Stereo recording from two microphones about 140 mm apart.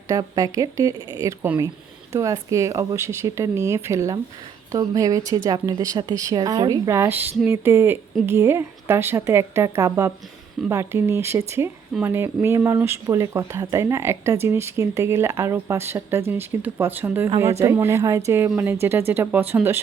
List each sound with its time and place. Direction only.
0.1 s speech: 25° right (ahead or behind)